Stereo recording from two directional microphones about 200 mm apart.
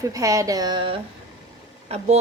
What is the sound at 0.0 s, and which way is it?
A woman's voice, 15° right (ahead or behind).